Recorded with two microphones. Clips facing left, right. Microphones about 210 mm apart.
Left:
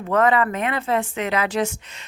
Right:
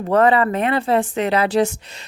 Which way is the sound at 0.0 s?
30° right (ahead or behind).